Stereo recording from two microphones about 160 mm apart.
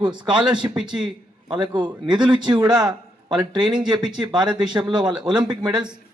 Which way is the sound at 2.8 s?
25° right (ahead or behind).